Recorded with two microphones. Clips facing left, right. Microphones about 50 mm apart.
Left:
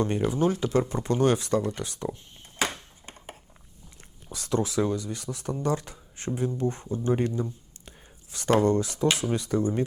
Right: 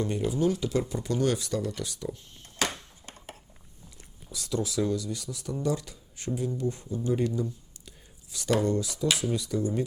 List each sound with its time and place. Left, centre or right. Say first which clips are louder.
0.2 s speech: left 2 dB; left
4.3 s speech: left 4 dB; left